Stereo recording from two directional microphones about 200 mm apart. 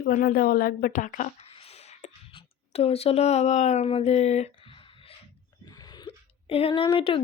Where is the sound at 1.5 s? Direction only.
30° left (ahead or behind).